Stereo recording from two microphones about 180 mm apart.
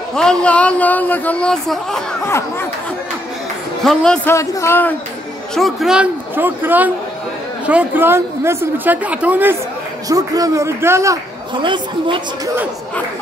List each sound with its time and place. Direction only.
0.1 s speech: 5° left (ahead or behind)
3.8 s speech: 5° left (ahead or behind)
5.5 s a woman's voice: centre (ahead or behind); by 11.1 s 15° right (ahead or behind)
11.6 s a woman's voice: 25° right (ahead or behind)